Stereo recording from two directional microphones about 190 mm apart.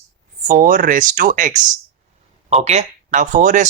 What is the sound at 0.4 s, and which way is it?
Speech, 45° right (ahead or behind).